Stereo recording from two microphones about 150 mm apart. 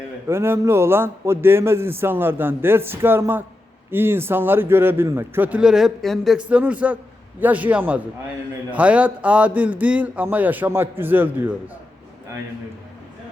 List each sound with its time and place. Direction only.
0.3 s a man's voice: 15° right (ahead or behind)